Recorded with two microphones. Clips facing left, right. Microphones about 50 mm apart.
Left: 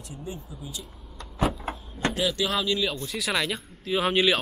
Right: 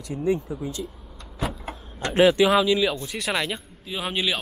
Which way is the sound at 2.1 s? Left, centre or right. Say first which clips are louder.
Right 13 dB; right.